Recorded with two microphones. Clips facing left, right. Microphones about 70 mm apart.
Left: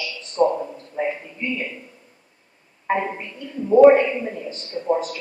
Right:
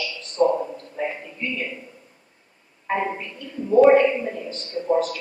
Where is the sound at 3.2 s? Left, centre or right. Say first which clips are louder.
Left 2 dB; centre.